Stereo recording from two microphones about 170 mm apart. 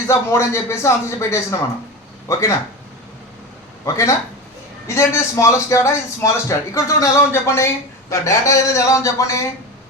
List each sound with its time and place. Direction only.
0.1 s a man's voice: 15° left (ahead or behind)
3.8 s a man's voice: 20° left (ahead or behind)